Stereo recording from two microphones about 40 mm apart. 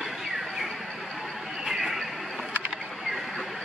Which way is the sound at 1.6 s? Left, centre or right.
Centre.